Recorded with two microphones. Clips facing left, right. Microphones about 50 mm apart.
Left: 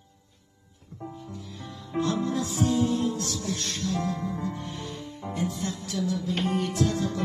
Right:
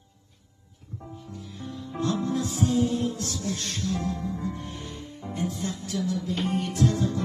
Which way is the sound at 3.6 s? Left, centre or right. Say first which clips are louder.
Even; right.